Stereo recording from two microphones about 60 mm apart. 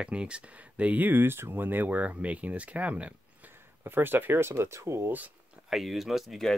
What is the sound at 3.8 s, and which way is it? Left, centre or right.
Speech, right.